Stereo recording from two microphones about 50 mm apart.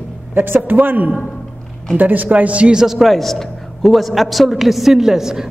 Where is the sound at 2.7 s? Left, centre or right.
Centre.